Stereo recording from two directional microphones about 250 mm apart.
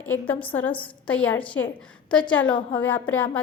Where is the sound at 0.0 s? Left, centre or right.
Centre.